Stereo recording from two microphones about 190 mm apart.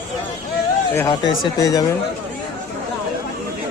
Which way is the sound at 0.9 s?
20° left (ahead or behind).